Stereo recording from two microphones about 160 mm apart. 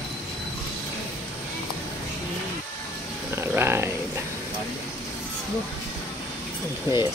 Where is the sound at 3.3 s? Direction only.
15° right (ahead or behind).